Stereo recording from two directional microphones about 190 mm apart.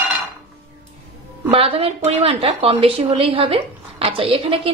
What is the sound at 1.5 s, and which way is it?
A woman's voice, 30° right (ahead or behind).